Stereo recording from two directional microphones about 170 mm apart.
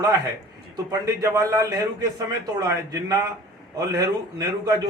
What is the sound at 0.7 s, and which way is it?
A man's voice, 20° right (ahead or behind).